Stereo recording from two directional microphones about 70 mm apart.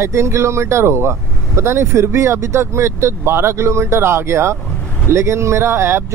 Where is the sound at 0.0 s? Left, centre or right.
Right.